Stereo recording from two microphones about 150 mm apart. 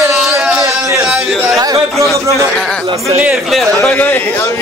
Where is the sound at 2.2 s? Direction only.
20° right (ahead or behind).